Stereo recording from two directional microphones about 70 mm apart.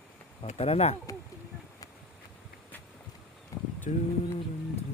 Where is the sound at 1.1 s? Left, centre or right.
Left.